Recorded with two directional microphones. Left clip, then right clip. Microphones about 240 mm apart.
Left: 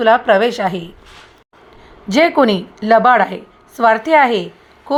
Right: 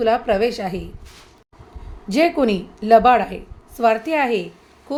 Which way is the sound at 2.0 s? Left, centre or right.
Centre.